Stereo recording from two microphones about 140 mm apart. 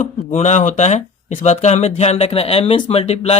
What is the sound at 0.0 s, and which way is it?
Speech, 55° left (ahead or behind).